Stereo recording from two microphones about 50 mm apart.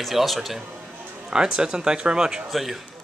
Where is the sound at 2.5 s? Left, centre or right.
Centre.